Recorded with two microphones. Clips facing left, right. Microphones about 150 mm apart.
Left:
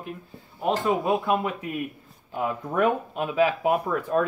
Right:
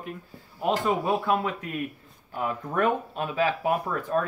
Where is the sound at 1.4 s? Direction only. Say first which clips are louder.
Left 1 dB; 10° left (ahead or behind).